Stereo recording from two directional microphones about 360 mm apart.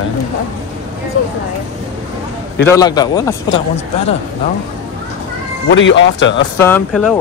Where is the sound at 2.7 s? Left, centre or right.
Centre.